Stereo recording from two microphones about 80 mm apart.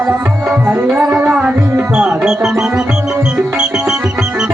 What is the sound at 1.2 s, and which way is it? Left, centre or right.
Music, centre.